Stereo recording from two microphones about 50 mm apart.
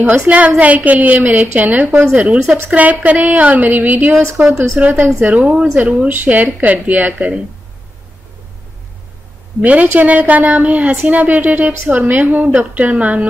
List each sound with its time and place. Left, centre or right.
0.6 s a woman's voice: right
1.9 s speech: right
2.1 s a woman's voice: right
4.7 s a woman's voice: right
9.6 s a woman's voice: right